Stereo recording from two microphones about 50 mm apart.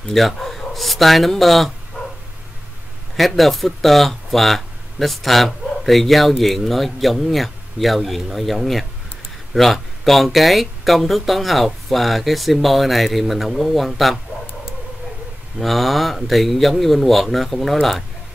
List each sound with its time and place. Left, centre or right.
0.1 s speech: centre
3.2 s speech: centre
15.6 s speech: centre